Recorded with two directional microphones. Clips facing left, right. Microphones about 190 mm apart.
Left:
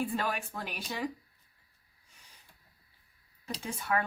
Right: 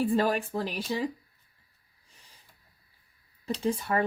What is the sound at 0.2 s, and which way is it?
Speech, 35° right (ahead or behind).